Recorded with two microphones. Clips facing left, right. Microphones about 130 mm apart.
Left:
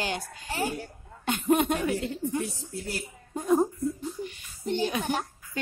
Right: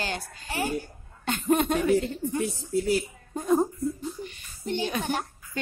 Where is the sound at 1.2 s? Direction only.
10° left (ahead or behind).